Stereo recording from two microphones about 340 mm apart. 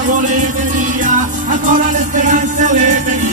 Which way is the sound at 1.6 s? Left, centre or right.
Right.